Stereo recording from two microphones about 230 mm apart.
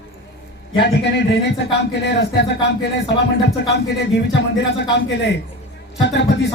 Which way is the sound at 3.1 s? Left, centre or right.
Left.